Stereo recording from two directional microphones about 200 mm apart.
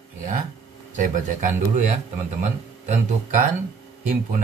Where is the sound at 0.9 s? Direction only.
40° right (ahead or behind).